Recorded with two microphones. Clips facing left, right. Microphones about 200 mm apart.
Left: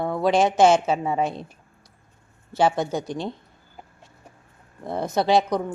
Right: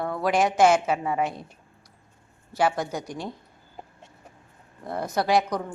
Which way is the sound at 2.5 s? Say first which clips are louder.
Left 3 dB; 25° left (ahead or behind).